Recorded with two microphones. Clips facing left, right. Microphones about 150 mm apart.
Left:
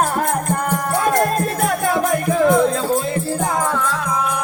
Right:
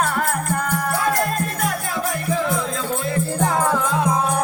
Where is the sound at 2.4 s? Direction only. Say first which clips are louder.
Left 13 dB; 55° left (ahead or behind).